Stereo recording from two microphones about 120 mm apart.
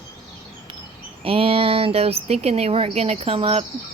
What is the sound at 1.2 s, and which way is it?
Speech, 50° right (ahead or behind).